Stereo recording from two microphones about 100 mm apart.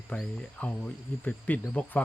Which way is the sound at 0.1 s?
10° left (ahead or behind).